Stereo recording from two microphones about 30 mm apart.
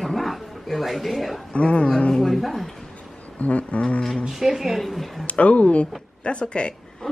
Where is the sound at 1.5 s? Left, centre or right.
Left.